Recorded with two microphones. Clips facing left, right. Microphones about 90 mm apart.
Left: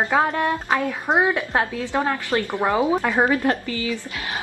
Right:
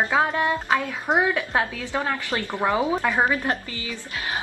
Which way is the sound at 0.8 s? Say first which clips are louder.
Left 2 dB; 20° left (ahead or behind).